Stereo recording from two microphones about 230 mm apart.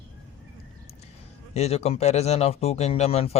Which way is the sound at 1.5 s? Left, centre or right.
Left.